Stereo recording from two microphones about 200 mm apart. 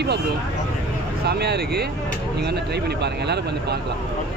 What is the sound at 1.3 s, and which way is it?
Speech, 55° right (ahead or behind).